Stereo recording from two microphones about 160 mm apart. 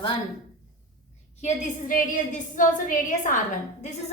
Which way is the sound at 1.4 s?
55° left (ahead or behind).